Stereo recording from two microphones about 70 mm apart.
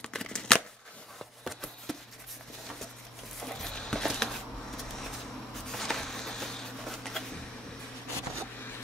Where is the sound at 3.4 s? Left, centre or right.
Centre.